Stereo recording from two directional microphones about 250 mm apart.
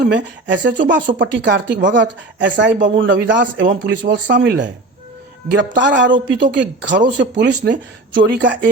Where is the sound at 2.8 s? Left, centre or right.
Right.